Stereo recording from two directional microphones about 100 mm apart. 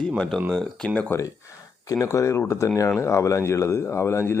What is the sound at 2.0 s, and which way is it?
Speech, 30° left (ahead or behind).